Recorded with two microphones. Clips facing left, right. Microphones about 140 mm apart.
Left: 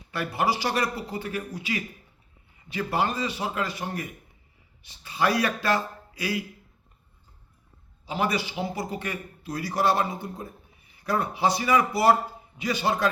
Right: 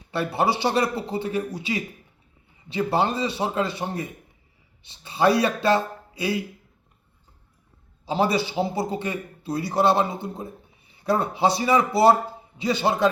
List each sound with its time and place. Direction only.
0.1 s a man's voice: 30° right (ahead or behind)
8.0 s a man's voice: 30° right (ahead or behind)